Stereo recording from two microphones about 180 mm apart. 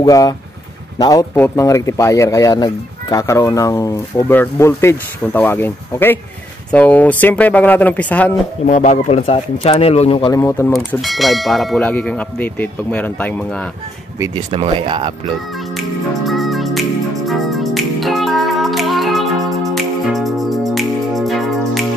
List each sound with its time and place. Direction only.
0.0 s speech: 20° left (ahead or behind)
8.6 s speech: 45° left (ahead or behind); by 10.4 s 30° left (ahead or behind)
11.0 s speech: centre (ahead or behind)
14.2 s speech: 25° right (ahead or behind)
16.3 s music: centre (ahead or behind)